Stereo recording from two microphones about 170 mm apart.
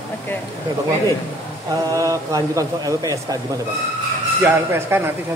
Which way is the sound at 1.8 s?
20° right (ahead or behind).